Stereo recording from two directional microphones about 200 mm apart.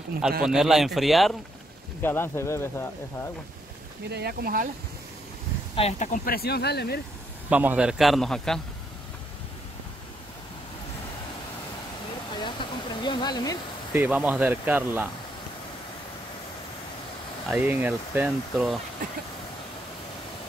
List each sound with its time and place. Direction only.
0.4 s a man's voice: 5° right (ahead or behind)
2.0 s speech: 10° left (ahead or behind)
4.1 s speech: 55° right (ahead or behind)
5.8 s speech: 35° left (ahead or behind); by 7.0 s 55° left (ahead or behind)
7.4 s a man's voice: 10° right (ahead or behind)
12.4 s a sound: 25° left (ahead or behind)
13.9 s speech: 10° right (ahead or behind)
17.5 s speech: 10° right (ahead or behind)